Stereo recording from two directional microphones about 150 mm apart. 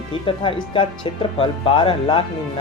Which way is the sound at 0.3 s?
35° left (ahead or behind).